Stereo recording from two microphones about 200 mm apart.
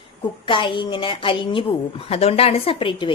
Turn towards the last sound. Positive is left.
turn(degrees=25)  # may be behind; listen again after turning